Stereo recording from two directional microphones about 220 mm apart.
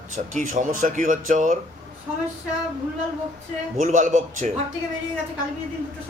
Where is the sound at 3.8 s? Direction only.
35° right (ahead or behind).